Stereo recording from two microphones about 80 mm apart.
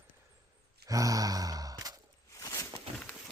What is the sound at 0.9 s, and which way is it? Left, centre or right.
Sigh, right.